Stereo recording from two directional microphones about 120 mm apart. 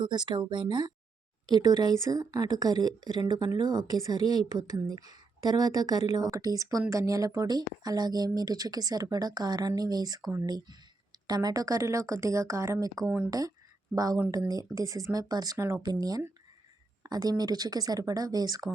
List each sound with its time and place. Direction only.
0.0 s speech: 40° right (ahead or behind)